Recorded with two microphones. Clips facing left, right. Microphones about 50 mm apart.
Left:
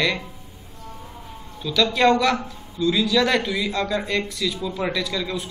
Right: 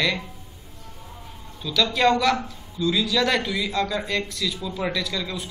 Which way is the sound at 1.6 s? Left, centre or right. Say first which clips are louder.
Left 2 dB; centre.